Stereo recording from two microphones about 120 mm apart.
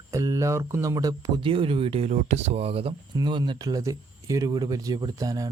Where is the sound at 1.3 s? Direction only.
45° right (ahead or behind).